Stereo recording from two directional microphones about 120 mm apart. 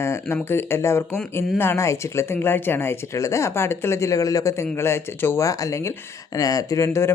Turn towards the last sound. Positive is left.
turn(degrees=25)  # may be behind; listen again after turning